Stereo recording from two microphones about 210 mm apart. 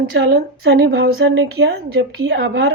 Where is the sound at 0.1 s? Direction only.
50° right (ahead or behind).